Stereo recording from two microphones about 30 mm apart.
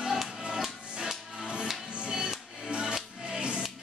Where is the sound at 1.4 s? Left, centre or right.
Right.